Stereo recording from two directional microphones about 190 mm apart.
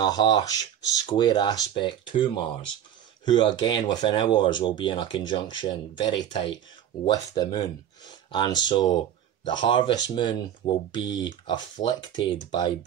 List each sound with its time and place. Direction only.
0.0 s speech: 25° left (ahead or behind)